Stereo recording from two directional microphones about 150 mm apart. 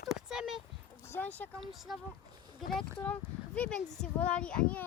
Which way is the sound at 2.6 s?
Centre (ahead or behind).